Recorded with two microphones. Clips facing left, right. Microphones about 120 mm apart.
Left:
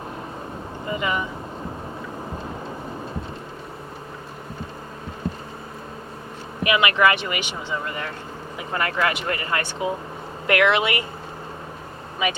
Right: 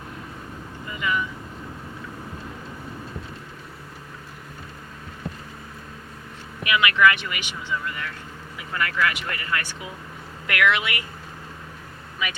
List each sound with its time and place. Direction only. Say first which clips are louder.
0.9 s vehicle: left 2 dB; 30° left (ahead or behind)
6.6 s speech: left 1 dB; 30° left (ahead or behind)